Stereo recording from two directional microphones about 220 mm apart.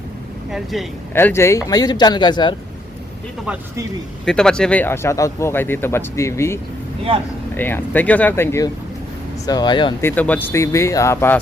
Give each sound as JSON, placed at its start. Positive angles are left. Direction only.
{"t": 0.5, "sound": "speech", "side_deg": 0}
{"t": 1.1, "sound": "speech", "side_deg": 10}
{"t": 3.4, "sound": "speech", "side_deg": -5}
{"t": 10.1, "sound": "speech", "side_deg": 5}